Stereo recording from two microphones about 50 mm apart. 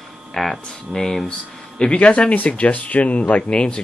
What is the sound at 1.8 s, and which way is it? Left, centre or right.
Speech, left.